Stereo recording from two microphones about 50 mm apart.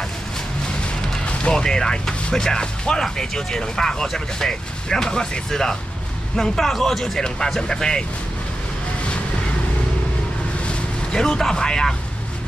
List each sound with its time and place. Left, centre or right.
0.8 s speech: centre
10.6 s vehicle: centre